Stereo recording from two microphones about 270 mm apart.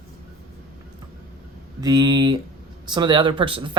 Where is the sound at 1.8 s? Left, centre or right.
Centre.